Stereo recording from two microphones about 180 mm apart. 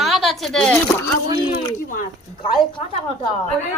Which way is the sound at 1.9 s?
50° left (ahead or behind).